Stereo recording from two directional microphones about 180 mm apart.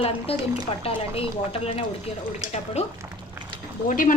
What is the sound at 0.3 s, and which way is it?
A woman's voice, 35° left (ahead or behind).